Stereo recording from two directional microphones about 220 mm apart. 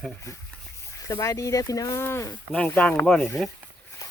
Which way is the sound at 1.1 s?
15° left (ahead or behind).